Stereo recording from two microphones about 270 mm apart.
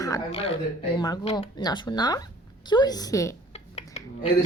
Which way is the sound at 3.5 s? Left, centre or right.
Left.